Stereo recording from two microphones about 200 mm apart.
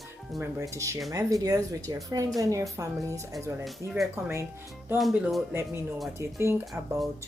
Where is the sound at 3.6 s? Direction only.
Centre (ahead or behind).